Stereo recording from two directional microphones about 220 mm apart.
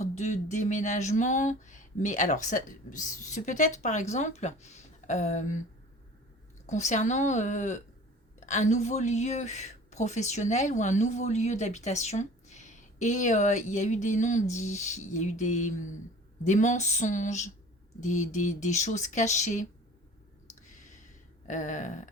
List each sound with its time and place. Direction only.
0.0 s a woman's voice: 30° left (ahead or behind)
6.7 s a woman's voice: 35° left (ahead or behind)
20.6 s a sound: 35° left (ahead or behind)
21.4 s a woman's voice: 35° left (ahead or behind)